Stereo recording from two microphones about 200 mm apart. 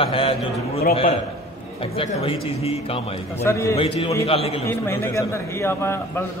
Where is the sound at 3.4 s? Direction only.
15° left (ahead or behind).